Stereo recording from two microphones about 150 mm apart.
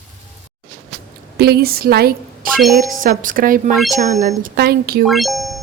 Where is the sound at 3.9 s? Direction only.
55° right (ahead or behind).